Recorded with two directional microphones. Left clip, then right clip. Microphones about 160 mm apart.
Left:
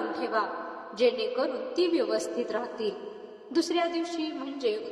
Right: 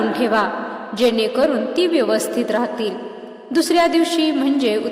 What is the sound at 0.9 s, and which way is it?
A woman's voice, 65° right (ahead or behind).